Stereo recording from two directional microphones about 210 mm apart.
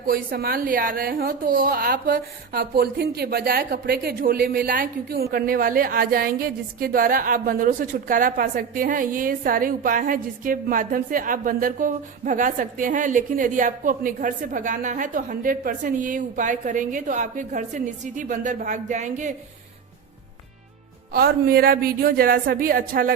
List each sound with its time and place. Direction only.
0.0 s a woman's voice: 45° right (ahead or behind)
21.1 s a woman's voice: 45° right (ahead or behind)